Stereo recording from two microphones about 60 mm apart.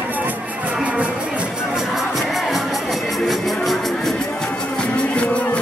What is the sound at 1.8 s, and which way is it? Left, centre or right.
Music, centre.